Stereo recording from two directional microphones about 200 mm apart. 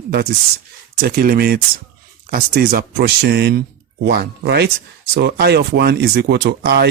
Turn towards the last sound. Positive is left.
turn(degrees=-55)  # may be behind; listen again after turning